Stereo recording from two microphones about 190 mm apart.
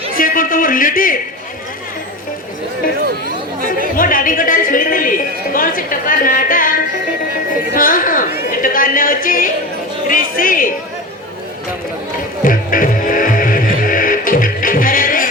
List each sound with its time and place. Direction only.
0.2 s speech: 45° left (ahead or behind)
3.1 s chatter: 50° right (ahead or behind)
3.9 s speech: 45° left (ahead or behind)
7.7 s a sound: 45° left (ahead or behind)
8.6 s music: 45° left (ahead or behind)
10.1 s speech: 45° left (ahead or behind)
12.5 s music: 45° left (ahead or behind)